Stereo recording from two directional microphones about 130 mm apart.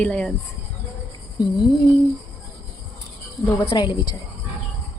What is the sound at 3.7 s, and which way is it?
Speech, 35° left (ahead or behind).